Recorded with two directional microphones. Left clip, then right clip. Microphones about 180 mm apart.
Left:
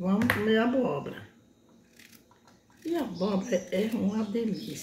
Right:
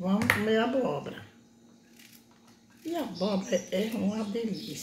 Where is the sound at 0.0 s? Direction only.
30° left (ahead or behind).